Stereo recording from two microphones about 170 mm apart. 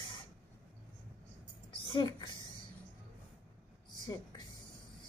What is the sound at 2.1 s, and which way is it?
Speech, 25° left (ahead or behind).